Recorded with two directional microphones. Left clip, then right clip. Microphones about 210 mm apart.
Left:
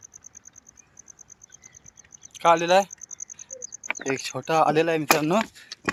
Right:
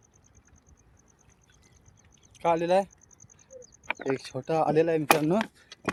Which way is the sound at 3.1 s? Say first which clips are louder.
Left 17 dB; 25° right (ahead or behind).